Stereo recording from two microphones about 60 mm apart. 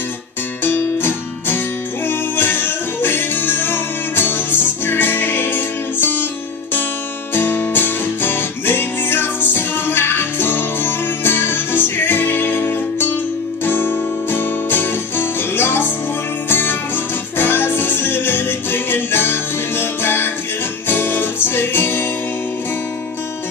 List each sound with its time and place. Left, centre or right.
0.7 s music: left
7.3 s music: left
13.7 s music: left